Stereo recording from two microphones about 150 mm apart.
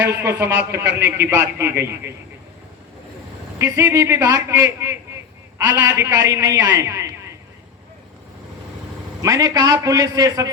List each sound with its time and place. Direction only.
0.1 s speech: 15° right (ahead or behind)
3.6 s a man's voice: 20° right (ahead or behind)
9.2 s a man's voice: 20° right (ahead or behind)